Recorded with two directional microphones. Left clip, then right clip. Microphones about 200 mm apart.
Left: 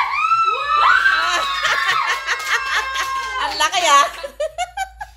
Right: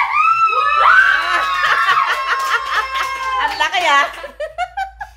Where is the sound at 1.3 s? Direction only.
Centre (ahead or behind).